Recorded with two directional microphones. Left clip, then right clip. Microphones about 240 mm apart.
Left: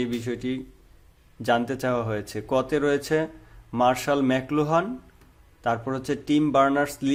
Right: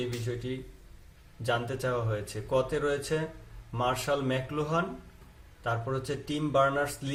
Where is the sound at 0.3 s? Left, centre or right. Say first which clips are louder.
Left 5 dB; left.